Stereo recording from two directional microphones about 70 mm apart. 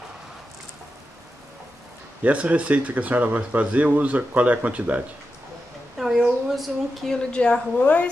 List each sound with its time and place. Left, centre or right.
2.2 s speech: centre
5.9 s a sound: centre
7.3 s a woman's voice: centre